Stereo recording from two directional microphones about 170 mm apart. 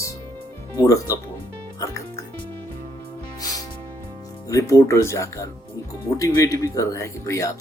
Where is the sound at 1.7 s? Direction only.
15° left (ahead or behind).